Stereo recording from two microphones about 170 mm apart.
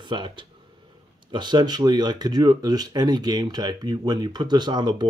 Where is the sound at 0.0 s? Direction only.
30° right (ahead or behind).